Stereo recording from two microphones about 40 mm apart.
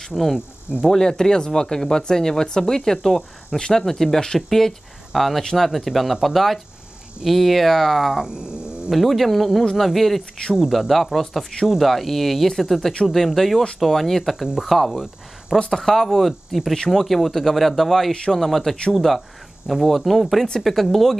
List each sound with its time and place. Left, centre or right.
0.1 s speech: centre
0.8 s speech: centre
4.5 s speech: centre
8.2 s dog: centre
8.9 s speech: centre
14.3 s speech: centre